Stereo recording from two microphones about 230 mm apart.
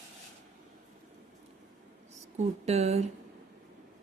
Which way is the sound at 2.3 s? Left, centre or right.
Right.